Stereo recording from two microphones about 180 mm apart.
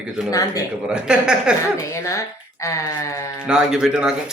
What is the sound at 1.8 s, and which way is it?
Speech, 15° left (ahead or behind).